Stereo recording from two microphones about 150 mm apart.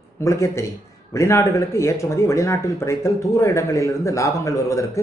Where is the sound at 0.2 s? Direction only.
20° left (ahead or behind).